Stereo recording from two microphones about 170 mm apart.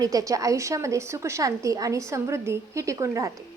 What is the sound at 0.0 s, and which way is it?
A woman's voice, 20° right (ahead or behind).